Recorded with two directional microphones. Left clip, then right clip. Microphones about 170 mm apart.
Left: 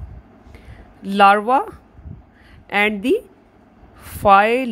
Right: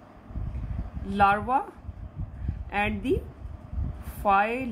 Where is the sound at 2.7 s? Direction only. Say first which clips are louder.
Left 10 dB; 55° left (ahead or behind).